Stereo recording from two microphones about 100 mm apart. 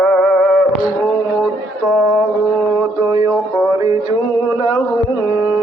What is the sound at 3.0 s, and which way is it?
Music, 40° right (ahead or behind).